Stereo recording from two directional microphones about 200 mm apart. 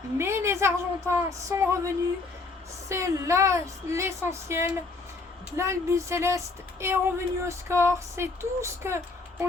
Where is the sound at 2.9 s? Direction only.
15° right (ahead or behind).